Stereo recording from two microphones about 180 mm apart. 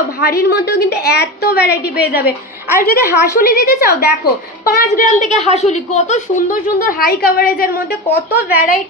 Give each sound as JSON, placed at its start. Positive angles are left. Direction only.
{"t": 0.2, "sound": "a woman's voice", "side_deg": 60}
{"t": 2.8, "sound": "a woman's voice", "side_deg": 55}
{"t": 6.8, "sound": "a woman's voice", "side_deg": 50}